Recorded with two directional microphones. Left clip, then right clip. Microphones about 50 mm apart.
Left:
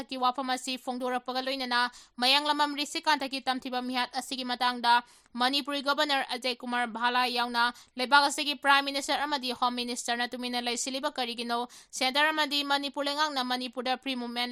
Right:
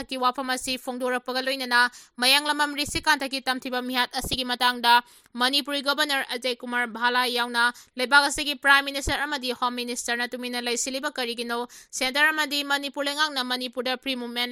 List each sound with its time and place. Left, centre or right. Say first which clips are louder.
0.1 s speech: right 3 dB; right
3.9 s a woman's voice: right 8 dB; right
5.4 s speech: right 4 dB; right; by 6.9 s centre
7.0 s a woman's voice: right 4 dB; right